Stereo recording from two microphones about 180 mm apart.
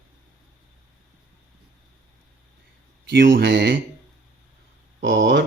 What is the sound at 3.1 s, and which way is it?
Speech, 70° right (ahead or behind).